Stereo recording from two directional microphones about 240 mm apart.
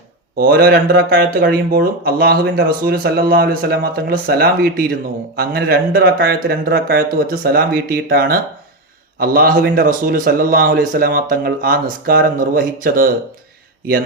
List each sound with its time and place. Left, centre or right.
0.3 s speech: right